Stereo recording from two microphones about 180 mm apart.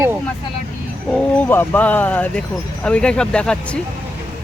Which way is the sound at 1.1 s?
10° left (ahead or behind).